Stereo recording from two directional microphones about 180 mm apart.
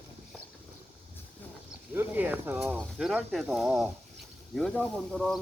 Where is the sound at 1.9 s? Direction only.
10° right (ahead or behind).